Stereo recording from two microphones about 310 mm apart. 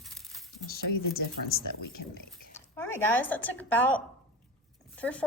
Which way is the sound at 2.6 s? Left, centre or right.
Centre.